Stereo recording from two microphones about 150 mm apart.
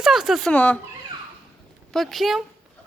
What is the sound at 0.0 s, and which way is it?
Speech, 5° right (ahead or behind).